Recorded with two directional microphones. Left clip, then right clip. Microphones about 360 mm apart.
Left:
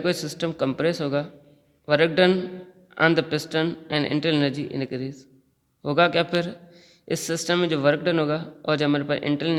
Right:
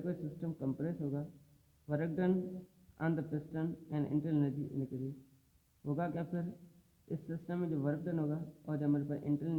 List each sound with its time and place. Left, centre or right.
0.0 s a man's voice: left